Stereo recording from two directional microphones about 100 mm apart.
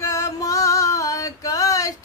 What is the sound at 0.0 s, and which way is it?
Female singing, 35° left (ahead or behind).